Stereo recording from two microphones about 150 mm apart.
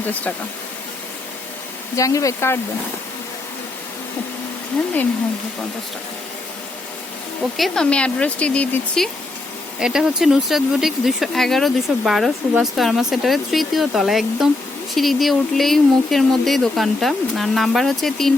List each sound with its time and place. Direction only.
0.0 s speech: 10° left (ahead or behind)
2.0 s speech: 20° left (ahead or behind)
7.5 s speech: centre (ahead or behind)
9.8 s speech: 5° right (ahead or behind)